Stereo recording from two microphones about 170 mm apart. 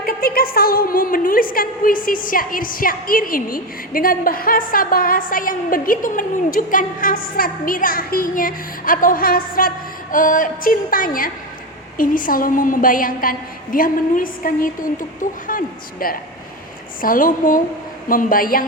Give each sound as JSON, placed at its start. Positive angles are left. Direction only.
{"t": 0.0, "sound": "a woman's voice", "side_deg": 60}